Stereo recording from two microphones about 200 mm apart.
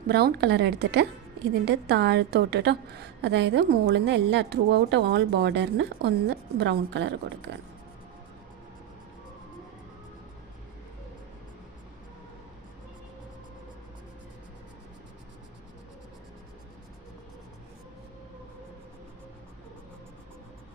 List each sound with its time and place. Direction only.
0.1 s a woman's voice: 50° right (ahead or behind)